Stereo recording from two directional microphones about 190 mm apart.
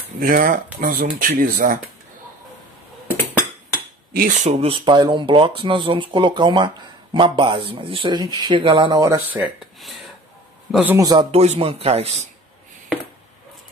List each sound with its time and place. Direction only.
0.2 s speech: 45° right (ahead or behind)
4.1 s a man's voice: 45° right (ahead or behind); by 11.1 s 10° right (ahead or behind)
11.3 s speech: 35° right (ahead or behind)